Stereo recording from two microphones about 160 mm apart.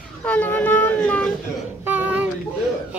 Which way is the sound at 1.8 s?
10° right (ahead or behind).